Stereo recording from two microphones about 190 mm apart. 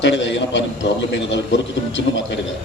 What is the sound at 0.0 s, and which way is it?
A man's voice, 70° left (ahead or behind).